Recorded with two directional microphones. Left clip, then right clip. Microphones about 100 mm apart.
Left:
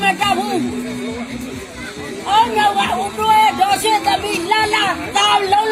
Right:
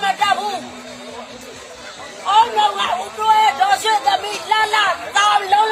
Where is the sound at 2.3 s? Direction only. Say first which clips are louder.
Even; 35° right (ahead or behind).